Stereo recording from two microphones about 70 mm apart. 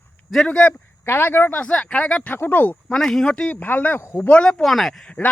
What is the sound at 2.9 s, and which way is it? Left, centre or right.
Speech, centre.